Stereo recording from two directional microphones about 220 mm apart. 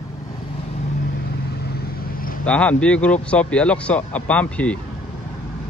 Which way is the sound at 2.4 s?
5° left (ahead or behind).